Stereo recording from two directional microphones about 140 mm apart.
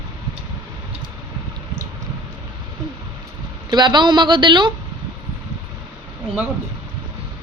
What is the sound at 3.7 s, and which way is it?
A woman's voice, 35° right (ahead or behind).